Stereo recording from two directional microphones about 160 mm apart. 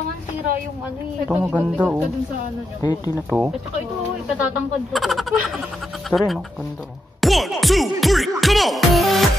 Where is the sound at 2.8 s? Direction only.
25° left (ahead or behind).